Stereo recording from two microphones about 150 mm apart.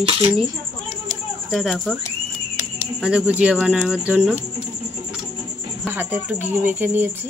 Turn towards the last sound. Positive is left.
turn(degrees=-15)  # may be behind; listen again after turning